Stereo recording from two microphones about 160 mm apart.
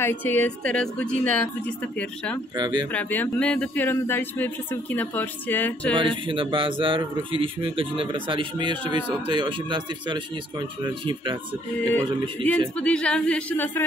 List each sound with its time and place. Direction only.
0.0 s speech: 15° left (ahead or behind)
2.5 s speech: 25° right (ahead or behind)
2.9 s speech: 10° left (ahead or behind)
5.9 s a man's voice: 35° right (ahead or behind)
12.4 s speech: 5° left (ahead or behind)